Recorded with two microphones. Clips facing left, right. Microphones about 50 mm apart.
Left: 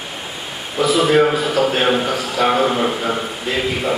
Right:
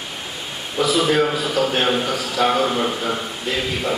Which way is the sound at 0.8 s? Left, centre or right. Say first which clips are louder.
Left 4 dB; centre.